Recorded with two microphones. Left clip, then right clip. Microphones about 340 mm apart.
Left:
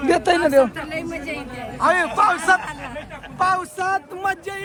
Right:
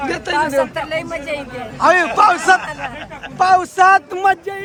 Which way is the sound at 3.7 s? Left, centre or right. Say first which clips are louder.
Right 12 dB; right.